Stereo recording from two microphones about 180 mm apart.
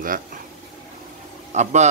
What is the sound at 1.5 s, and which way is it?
Speech, 40° right (ahead or behind).